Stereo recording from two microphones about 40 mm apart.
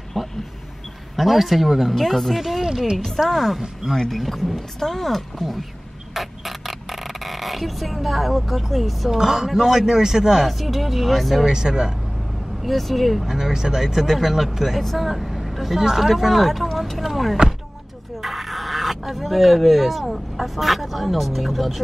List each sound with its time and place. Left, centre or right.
0.2 s speech: centre
6.1 s a sound: centre
9.1 s speech: centre
12.6 s a woman's voice: centre
16.4 s vehicle: centre
17.0 s speech: centre